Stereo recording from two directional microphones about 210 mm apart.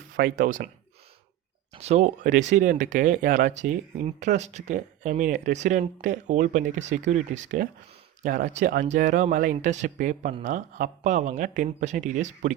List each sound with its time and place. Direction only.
0.2 s speech: 45° right (ahead or behind)
1.7 s speech: 30° right (ahead or behind)